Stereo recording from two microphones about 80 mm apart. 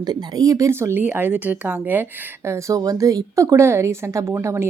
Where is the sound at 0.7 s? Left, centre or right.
Right.